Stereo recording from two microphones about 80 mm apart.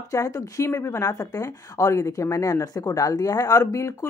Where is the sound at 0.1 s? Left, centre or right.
Left.